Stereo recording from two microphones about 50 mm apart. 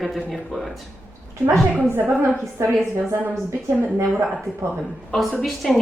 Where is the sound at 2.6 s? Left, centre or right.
Right.